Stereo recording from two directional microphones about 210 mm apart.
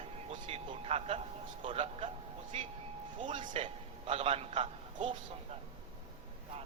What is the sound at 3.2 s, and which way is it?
A man's voice, 25° right (ahead or behind).